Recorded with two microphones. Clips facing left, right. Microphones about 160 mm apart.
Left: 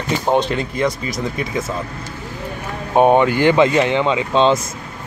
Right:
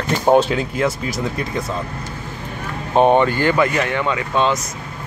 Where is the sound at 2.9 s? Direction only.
10° left (ahead or behind).